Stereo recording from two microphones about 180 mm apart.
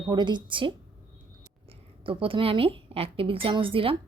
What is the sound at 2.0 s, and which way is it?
A woman's voice, 30° right (ahead or behind).